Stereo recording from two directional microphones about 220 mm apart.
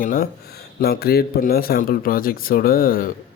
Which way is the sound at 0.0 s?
40° left (ahead or behind).